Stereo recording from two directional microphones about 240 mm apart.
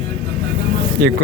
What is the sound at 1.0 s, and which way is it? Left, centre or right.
Speech, right.